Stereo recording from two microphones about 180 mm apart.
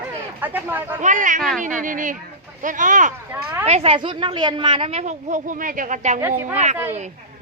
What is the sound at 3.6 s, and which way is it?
A woman's voice, 35° right (ahead or behind).